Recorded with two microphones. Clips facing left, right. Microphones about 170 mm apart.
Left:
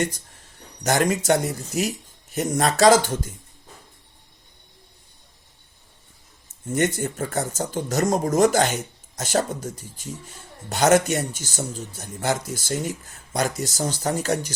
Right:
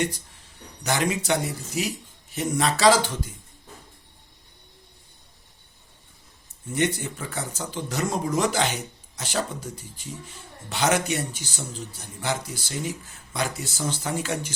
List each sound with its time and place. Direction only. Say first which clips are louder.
1.1 s speech: left 5 dB; 45° left (ahead or behind)
6.7 s speech: left 3 dB; 45° left (ahead or behind)